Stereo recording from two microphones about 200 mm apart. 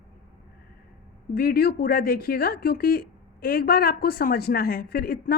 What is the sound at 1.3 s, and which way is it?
Speech, 50° left (ahead or behind).